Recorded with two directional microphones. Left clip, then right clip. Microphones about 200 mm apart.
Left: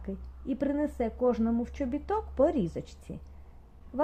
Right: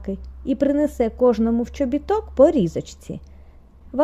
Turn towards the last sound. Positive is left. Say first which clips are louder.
# right 11 dB
turn(degrees=-50)  # may be behind; listen again after turning